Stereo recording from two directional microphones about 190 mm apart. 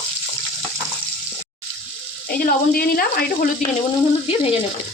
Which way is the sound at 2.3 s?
50° left (ahead or behind).